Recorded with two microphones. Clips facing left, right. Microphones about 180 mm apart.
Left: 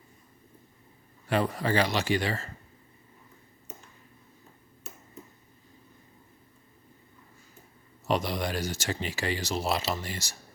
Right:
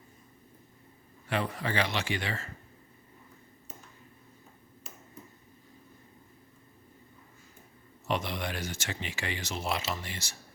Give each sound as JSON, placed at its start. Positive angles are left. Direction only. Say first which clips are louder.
{"t": 1.3, "sound": "speech", "louder": "left 5 dB", "side_deg": 40}
{"t": 8.0, "sound": "speech", "louder": "left 4 dB", "side_deg": 40}